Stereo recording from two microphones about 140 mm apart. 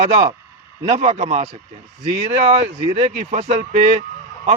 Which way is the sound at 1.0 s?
50° right (ahead or behind).